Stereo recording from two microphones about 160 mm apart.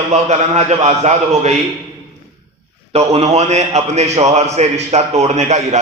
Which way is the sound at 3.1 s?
40° right (ahead or behind).